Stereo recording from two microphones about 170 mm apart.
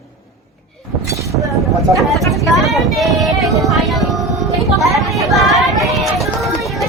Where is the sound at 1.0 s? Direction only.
20° right (ahead or behind).